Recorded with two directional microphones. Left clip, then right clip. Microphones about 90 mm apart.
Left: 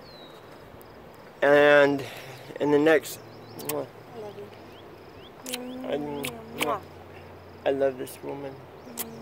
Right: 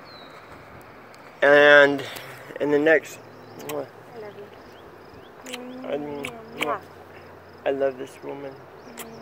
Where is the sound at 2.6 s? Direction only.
25° left (ahead or behind).